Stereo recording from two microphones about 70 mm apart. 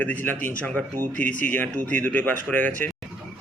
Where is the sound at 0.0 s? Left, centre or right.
Left.